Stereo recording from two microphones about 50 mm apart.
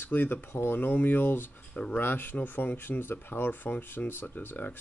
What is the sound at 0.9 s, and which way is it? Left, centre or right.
Speech, left.